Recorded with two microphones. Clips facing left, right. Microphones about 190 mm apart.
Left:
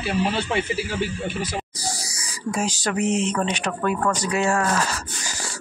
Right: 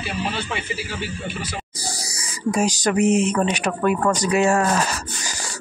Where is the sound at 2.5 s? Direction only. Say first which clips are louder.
Right 5 dB; 15° right (ahead or behind).